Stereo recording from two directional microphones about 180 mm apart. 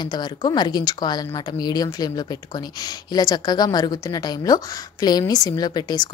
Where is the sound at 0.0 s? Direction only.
25° left (ahead or behind).